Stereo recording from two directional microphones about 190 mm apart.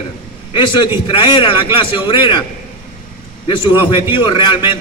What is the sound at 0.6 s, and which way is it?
A man's voice, 25° left (ahead or behind).